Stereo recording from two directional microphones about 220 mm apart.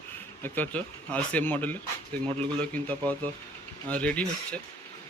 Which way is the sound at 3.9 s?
5° left (ahead or behind).